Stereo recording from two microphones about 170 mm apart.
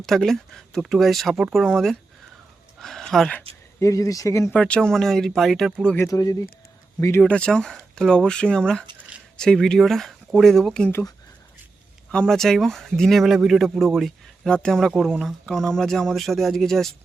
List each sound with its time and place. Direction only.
0.0 s speech: centre (ahead or behind)
2.8 s speech: centre (ahead or behind)
3.8 s speech: 20° left (ahead or behind)
4.4 s speech: 5° left (ahead or behind)
6.1 s speech: 20° left (ahead or behind)
7.2 s speech: 5° left (ahead or behind)
12.1 s speech: 5° left (ahead or behind)